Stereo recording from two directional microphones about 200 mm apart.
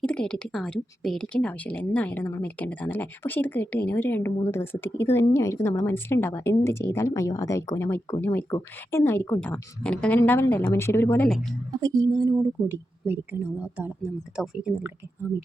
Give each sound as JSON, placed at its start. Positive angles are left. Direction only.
{"t": 0.0, "sound": "speech", "side_deg": 5}
{"t": 11.7, "sound": "a woman's voice", "side_deg": -20}
{"t": 12.3, "sound": "a woman's voice", "side_deg": -5}